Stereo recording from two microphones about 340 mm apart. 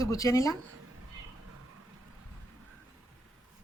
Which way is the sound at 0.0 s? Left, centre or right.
Centre.